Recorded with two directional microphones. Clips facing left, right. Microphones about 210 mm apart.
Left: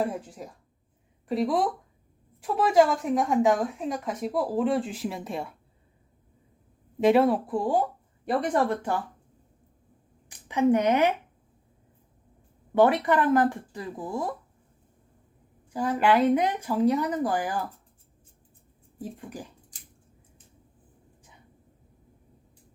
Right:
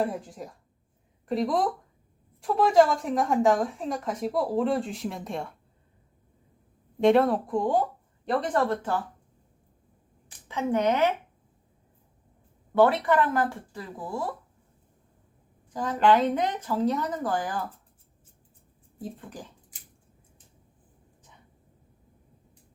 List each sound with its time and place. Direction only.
0.0 s speech: centre (ahead or behind)
7.0 s a woman's voice: 5° left (ahead or behind)
10.2 s speech: 15° left (ahead or behind)
12.7 s a woman's voice: 15° left (ahead or behind)
15.7 s a woman's voice: 10° left (ahead or behind)